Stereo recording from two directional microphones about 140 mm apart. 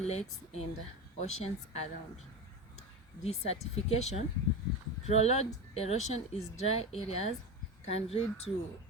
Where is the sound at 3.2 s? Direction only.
50° left (ahead or behind).